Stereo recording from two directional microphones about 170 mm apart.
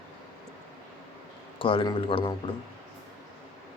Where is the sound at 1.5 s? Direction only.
30° left (ahead or behind).